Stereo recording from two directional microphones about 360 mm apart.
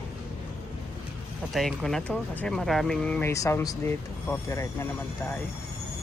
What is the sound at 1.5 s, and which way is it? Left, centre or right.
Speech, centre.